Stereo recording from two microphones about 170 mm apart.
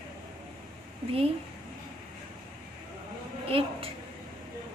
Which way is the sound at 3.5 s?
35° right (ahead or behind).